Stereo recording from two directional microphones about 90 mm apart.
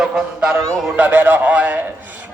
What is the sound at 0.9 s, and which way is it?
Speech, 20° right (ahead or behind).